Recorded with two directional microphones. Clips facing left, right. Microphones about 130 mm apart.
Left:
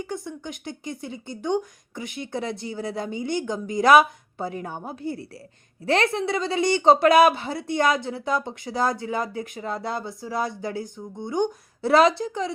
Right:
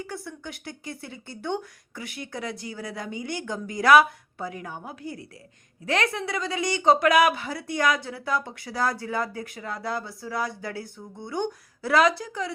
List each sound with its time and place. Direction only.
0.0 s a woman's voice: 20° left (ahead or behind)